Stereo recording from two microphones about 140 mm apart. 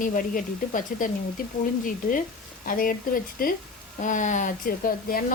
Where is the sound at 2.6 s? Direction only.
90° left.